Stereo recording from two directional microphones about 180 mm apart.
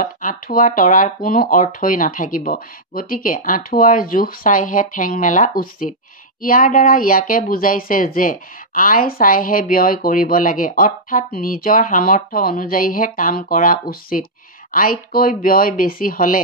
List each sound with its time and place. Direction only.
0.0 s speech: 50° left (ahead or behind)